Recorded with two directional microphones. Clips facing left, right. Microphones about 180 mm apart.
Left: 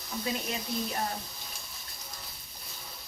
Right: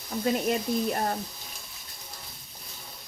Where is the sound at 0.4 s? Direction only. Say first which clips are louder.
Right 8 dB; 50° right (ahead or behind).